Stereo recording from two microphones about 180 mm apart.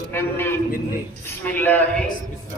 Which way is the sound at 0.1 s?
10° left (ahead or behind).